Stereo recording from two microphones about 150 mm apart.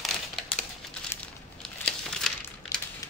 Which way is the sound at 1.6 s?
5° left (ahead or behind).